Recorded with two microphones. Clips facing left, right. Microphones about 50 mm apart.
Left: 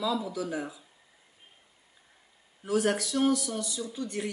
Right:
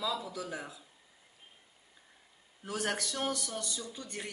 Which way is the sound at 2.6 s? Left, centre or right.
Centre.